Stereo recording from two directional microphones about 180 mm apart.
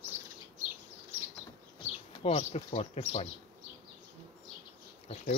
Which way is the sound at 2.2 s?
35° left (ahead or behind).